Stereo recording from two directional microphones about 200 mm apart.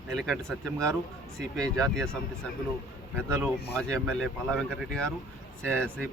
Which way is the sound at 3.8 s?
5° left (ahead or behind).